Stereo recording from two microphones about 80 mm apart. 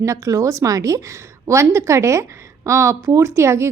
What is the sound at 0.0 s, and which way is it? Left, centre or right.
A woman's voice, right.